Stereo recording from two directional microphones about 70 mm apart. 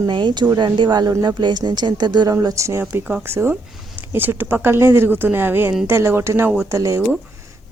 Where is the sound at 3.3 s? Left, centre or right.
Right.